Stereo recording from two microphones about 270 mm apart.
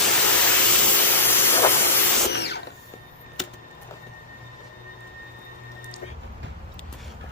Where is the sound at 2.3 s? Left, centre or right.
Left.